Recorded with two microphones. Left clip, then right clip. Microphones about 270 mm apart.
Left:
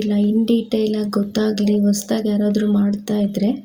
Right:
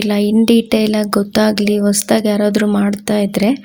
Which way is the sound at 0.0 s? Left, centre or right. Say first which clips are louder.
Right 5 dB; right.